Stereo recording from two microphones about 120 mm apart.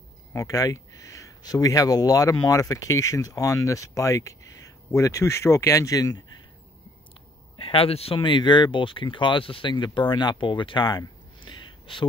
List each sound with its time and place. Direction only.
0.3 s speech: 30° left (ahead or behind)
7.5 s speech: 50° left (ahead or behind)